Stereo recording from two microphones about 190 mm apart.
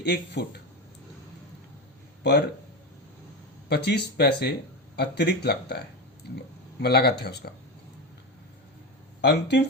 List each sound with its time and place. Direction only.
0.0 s speech: 60° left (ahead or behind)
3.7 s speech: 60° left (ahead or behind)
9.2 s speech: 60° left (ahead or behind)